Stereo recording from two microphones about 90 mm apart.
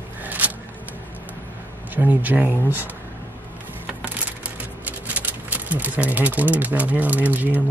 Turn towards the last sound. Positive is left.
turn(degrees=-20)  # may be behind; listen again after turning